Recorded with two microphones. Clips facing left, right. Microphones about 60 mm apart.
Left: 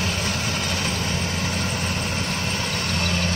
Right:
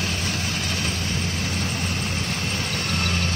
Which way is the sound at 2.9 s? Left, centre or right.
Centre.